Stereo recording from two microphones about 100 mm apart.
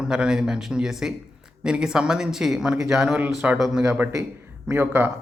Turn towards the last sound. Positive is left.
turn(degrees=-20)  # may be behind; listen again after turning